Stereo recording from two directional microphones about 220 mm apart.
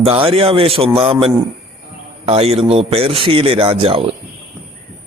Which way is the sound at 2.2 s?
25° right (ahead or behind).